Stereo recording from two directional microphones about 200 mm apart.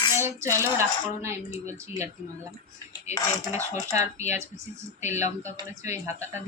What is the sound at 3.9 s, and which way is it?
A man's voice, 15° right (ahead or behind).